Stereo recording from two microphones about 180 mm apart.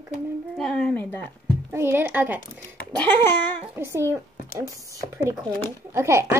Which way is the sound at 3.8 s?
15° right (ahead or behind).